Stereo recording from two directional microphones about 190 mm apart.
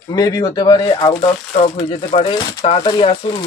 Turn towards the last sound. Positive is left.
turn(degrees=25)  # may be behind; listen again after turning